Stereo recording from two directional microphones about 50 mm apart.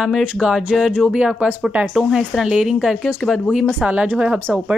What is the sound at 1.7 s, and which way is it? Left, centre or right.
Speech, right.